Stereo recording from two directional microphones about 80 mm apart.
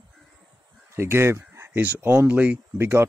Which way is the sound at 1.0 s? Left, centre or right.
Right.